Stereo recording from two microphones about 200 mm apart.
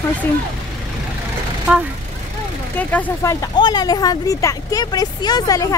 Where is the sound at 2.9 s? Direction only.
10° left (ahead or behind).